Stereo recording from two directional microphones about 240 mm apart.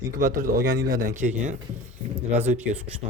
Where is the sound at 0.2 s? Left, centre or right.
Right.